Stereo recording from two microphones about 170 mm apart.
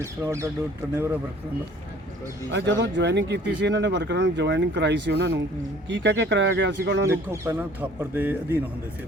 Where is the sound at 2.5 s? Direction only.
90° right.